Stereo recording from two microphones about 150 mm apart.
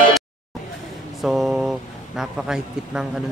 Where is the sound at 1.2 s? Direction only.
Centre (ahead or behind).